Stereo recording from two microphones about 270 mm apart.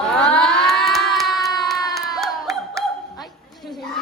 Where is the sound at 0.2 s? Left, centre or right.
Centre.